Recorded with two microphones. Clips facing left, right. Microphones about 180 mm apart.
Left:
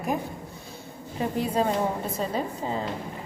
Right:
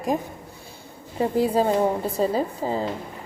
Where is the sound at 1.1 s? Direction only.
35° right (ahead or behind).